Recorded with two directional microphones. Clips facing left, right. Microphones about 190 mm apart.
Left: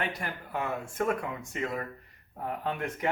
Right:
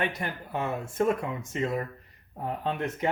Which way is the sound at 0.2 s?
25° right (ahead or behind).